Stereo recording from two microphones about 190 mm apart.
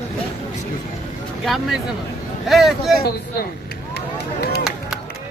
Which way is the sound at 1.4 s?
Centre (ahead or behind).